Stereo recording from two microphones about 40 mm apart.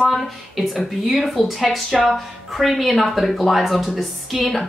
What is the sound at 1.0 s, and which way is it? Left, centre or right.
A woman's voice, centre.